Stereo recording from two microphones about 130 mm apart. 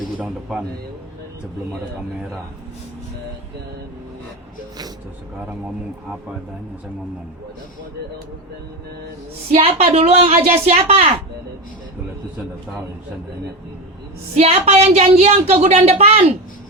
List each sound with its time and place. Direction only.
9.5 s speech: 50° right (ahead or behind)
14.3 s speech: 50° right (ahead or behind)